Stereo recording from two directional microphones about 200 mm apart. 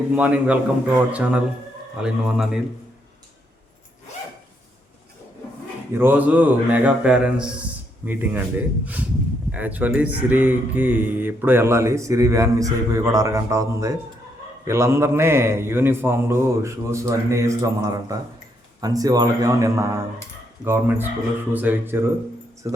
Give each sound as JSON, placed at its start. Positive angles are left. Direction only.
{"t": 0.1, "sound": "speech", "side_deg": -5}
{"t": 6.0, "sound": "speech", "side_deg": -10}